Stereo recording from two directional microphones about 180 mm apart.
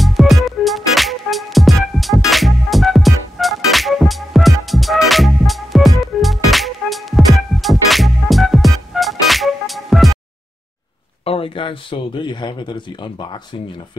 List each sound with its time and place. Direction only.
0.0 s music: centre (ahead or behind)
11.2 s a man's voice: 30° left (ahead or behind)